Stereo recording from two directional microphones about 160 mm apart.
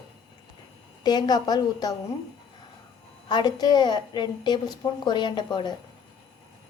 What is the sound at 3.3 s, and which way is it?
A woman's voice, 25° left (ahead or behind).